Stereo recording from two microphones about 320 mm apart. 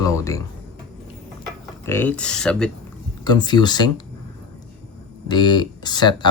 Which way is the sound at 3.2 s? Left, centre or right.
Centre.